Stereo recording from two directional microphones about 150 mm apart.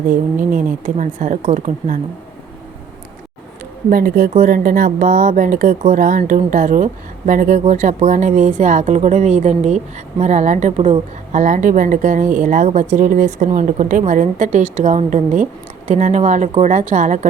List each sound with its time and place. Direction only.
0.9 s a woman's voice: 55° right (ahead or behind)
3.8 s a woman's voice: 70° right (ahead or behind)